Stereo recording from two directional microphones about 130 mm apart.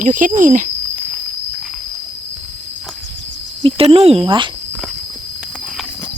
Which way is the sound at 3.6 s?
40° right (ahead or behind).